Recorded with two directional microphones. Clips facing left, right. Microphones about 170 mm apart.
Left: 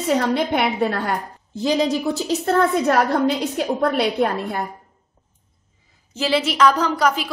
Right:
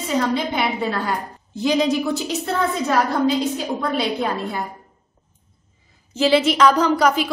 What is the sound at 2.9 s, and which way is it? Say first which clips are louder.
A woman's voice: left 1 dB; 60° left (ahead or behind).